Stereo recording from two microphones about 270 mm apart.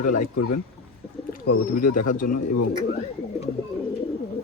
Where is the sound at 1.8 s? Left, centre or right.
Left.